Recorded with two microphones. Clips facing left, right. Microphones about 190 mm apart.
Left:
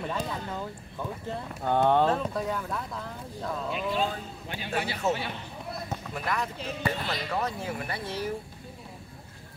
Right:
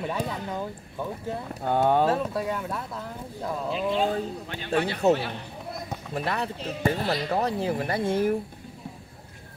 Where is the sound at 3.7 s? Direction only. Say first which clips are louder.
Right 4 dB; 25° right (ahead or behind).